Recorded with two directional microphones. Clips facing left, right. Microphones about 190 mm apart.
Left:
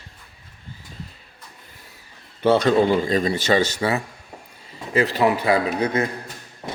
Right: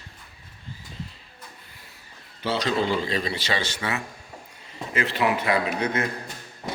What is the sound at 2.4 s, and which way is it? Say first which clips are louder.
Speech: left 8 dB; 55° left (ahead or behind).